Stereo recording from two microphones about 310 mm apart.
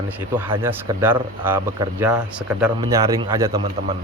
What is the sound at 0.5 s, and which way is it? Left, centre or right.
Speech, centre.